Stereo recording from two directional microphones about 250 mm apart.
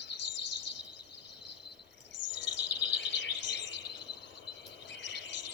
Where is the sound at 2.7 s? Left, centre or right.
Left.